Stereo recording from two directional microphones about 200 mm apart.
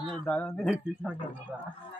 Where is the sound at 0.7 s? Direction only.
5° right (ahead or behind).